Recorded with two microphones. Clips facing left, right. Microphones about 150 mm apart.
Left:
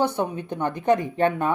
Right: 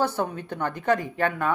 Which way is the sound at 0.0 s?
15° left (ahead or behind).